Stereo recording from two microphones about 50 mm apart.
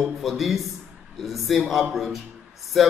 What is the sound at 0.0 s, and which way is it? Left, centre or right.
Speech, centre.